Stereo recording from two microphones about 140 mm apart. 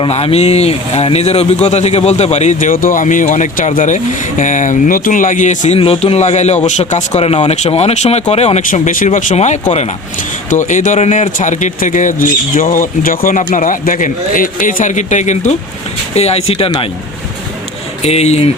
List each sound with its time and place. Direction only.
0.0 s speech: 45° left (ahead or behind); by 12.6 s 70° left (ahead or behind)
12.7 s a man's voice: 80° left
13.5 s a man's voice: 70° left (ahead or behind); by 16.7 s 45° left (ahead or behind)
18.0 s speech: 50° left (ahead or behind)